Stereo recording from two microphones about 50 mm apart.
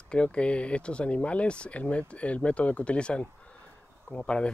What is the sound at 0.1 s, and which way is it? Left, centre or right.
Speech, left.